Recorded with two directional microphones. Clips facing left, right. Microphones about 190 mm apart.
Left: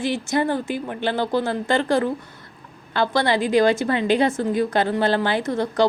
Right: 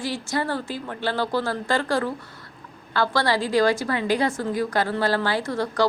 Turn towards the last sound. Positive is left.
turn(degrees=20)  # may be behind; listen again after turning